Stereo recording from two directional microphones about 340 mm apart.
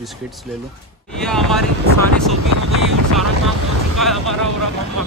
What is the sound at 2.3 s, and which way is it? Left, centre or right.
Speech, right.